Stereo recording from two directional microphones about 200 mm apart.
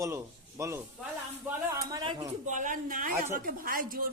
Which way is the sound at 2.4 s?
40° right (ahead or behind).